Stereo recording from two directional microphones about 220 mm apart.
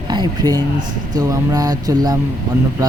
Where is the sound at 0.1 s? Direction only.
20° right (ahead or behind).